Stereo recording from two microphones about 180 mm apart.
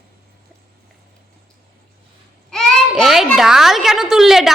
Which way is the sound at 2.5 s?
Centre (ahead or behind).